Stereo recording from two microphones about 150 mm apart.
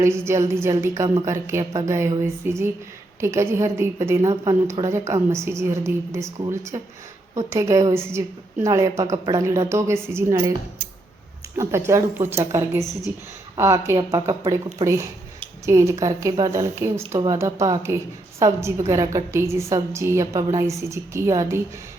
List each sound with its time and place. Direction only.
0.0 s a woman's voice: 15° right (ahead or behind)
11.5 s a woman's voice: 20° right (ahead or behind)